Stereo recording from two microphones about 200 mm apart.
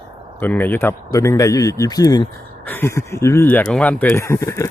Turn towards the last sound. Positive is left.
turn(degrees=15)  # may be behind; listen again after turning